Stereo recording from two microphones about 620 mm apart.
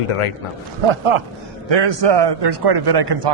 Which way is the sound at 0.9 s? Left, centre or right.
Right.